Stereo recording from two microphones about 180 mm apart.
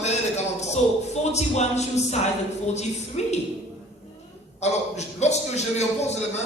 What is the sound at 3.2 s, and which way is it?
Speech, 40° left (ahead or behind).